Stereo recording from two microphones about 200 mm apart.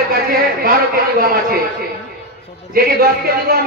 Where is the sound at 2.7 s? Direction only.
50° right (ahead or behind).